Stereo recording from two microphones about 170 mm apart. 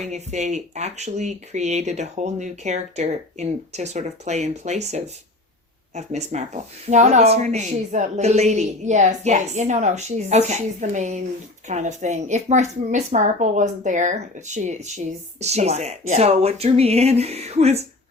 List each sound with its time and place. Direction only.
0.0 s a woman's voice: 40° right (ahead or behind)